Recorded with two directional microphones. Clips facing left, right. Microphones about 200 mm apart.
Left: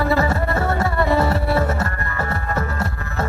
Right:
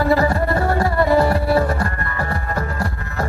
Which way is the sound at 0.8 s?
25° left (ahead or behind).